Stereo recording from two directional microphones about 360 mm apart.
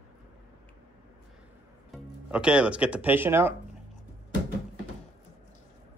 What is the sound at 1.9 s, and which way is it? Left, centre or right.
Speech, centre.